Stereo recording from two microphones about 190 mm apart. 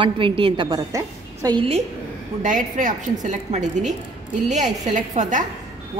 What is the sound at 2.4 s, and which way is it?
A woman's voice, 40° right (ahead or behind).